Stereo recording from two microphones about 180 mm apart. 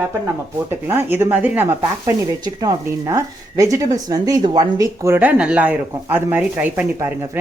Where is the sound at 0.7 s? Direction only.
10° right (ahead or behind).